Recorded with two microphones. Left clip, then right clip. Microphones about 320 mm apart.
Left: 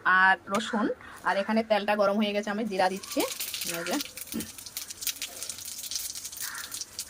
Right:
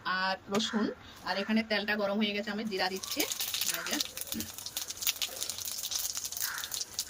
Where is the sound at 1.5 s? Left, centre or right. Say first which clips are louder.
Left 5 dB; centre.